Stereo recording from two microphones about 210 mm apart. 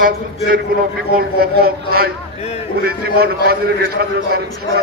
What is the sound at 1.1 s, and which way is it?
A man's voice, 45° right (ahead or behind).